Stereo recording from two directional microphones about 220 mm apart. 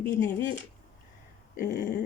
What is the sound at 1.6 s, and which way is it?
Speech, 40° left (ahead or behind).